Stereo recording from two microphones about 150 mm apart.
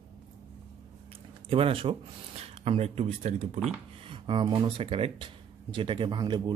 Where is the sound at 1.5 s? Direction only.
40° right (ahead or behind).